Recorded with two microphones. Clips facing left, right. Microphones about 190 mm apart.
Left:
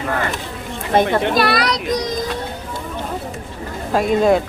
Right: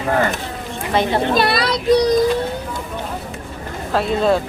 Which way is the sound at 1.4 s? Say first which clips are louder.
Even; 25° right (ahead or behind).